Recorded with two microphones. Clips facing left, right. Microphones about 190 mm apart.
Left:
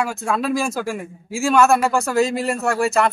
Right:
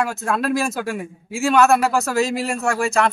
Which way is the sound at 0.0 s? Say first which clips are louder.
Even; centre (ahead or behind).